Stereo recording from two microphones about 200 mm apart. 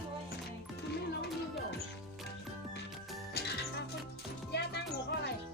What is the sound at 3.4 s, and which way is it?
Music, 55° left (ahead or behind).